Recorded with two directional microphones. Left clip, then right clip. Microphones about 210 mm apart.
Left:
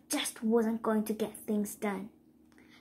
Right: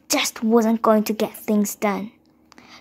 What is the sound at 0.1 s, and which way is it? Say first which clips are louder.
A woman's voice: right 12 dB; 40° right (ahead or behind).